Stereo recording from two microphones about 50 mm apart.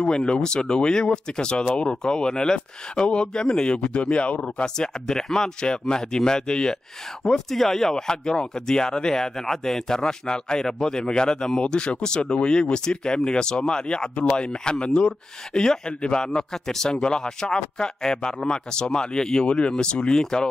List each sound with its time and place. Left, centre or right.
0.1 s speech: centre